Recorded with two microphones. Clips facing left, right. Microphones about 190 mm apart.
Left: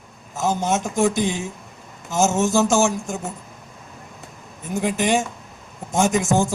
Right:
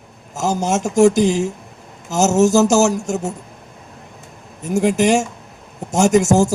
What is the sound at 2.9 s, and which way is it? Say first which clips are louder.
Speech: right 6 dB; 45° right (ahead or behind).